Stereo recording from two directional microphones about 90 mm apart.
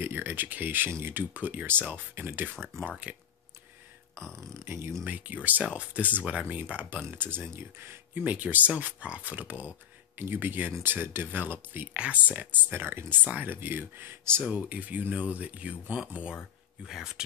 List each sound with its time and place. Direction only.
0.0 s speech: 25° right (ahead or behind)
4.2 s speech: 5° left (ahead or behind)
4.6 s speech: 30° right (ahead or behind)
5.0 s speech: 20° right (ahead or behind)
14.4 s speech: 15° right (ahead or behind)